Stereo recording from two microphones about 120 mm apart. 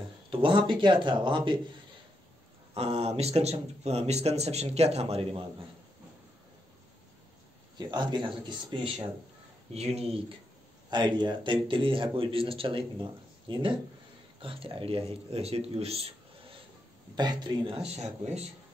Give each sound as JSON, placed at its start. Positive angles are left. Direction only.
{"t": 0.3, "sound": "speech", "side_deg": -45}
{"t": 2.7, "sound": "speech", "side_deg": -55}
{"t": 7.7, "sound": "speech", "side_deg": -40}
{"t": 9.8, "sound": "speech", "side_deg": -60}
{"t": 10.9, "sound": "speech", "side_deg": -40}
{"t": 17.1, "sound": "speech", "side_deg": -35}